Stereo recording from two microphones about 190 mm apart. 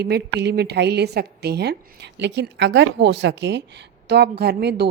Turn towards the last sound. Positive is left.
turn(degrees=-55)  # may be behind; listen again after turning